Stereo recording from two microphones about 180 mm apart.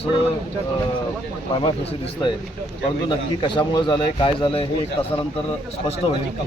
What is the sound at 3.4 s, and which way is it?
Speech, 25° left (ahead or behind).